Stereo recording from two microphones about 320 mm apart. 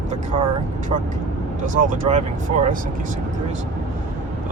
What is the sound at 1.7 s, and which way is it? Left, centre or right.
Speech, right.